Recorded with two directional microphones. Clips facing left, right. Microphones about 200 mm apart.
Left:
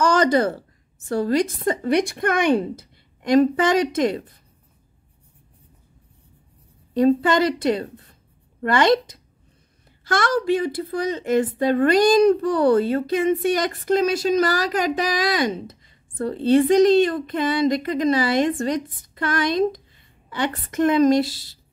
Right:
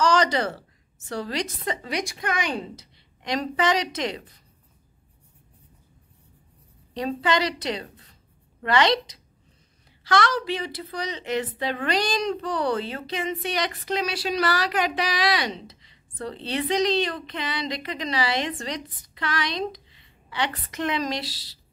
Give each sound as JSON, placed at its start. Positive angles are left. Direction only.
{"t": 0.0, "sound": "a woman's voice", "side_deg": 50}
{"t": 6.9, "sound": "a woman's voice", "side_deg": 50}
{"t": 7.9, "sound": "writing", "side_deg": 55}
{"t": 8.6, "sound": "a woman's voice", "side_deg": 50}